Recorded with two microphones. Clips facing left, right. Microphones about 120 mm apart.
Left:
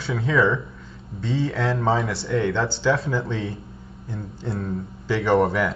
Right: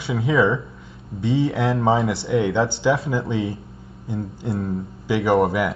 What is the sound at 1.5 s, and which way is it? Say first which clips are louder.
A man's voice: right 3 dB; 25° right (ahead or behind).